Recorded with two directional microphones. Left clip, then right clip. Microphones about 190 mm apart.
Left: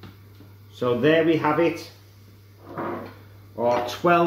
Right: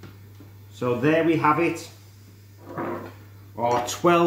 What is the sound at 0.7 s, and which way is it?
Speech, 20° right (ahead or behind).